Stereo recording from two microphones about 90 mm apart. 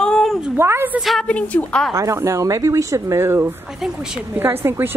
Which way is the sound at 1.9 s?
35° right (ahead or behind).